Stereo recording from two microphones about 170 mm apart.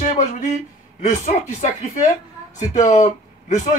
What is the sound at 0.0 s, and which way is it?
Speech, 40° left (ahead or behind).